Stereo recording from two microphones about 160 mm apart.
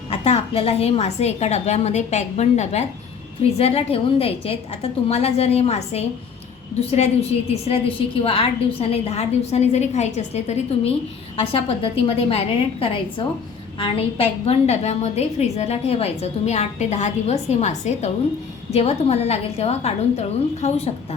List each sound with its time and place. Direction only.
0.1 s a woman's voice: 40° left (ahead or behind)